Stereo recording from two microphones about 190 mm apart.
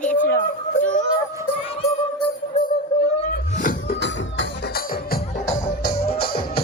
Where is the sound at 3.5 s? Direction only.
45° left (ahead or behind).